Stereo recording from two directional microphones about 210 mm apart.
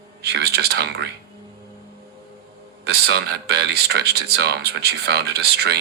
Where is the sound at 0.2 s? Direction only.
50° right (ahead or behind).